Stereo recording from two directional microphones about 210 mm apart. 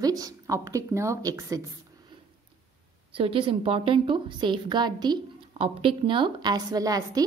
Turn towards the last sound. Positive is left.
turn(degrees=-15)  # may be behind; listen again after turning